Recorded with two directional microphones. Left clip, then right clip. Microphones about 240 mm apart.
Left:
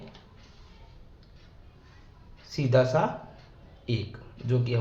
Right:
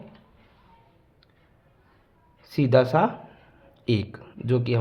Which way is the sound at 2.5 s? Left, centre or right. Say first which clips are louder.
Right 4 dB; right.